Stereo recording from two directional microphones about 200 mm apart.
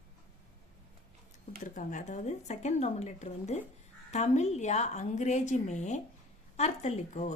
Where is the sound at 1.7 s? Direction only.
40° left (ahead or behind).